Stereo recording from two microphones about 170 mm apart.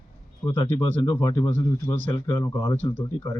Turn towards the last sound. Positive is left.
turn(degrees=15)  # may be behind; listen again after turning